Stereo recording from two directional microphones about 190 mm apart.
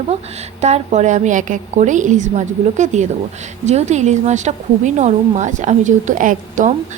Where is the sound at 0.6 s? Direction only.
35° right (ahead or behind).